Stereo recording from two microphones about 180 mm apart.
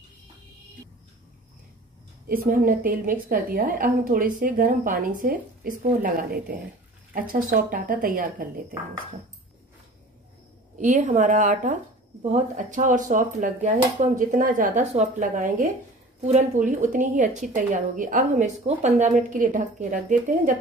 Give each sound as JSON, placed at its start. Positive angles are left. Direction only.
{"t": 2.4, "sound": "a woman's voice", "side_deg": -55}
{"t": 10.8, "sound": "a woman's voice", "side_deg": -45}